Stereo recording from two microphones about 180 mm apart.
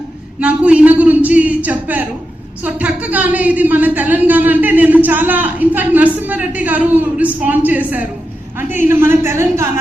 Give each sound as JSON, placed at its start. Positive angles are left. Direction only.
{"t": 0.3, "sound": "a man's voice", "side_deg": -5}